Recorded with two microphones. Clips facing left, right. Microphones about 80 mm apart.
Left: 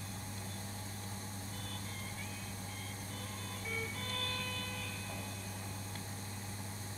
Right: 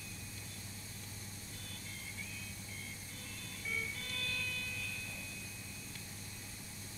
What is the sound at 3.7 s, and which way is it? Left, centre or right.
Music, left.